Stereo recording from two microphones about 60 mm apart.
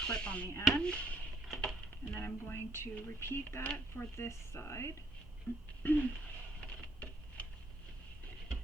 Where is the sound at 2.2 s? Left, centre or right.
Left.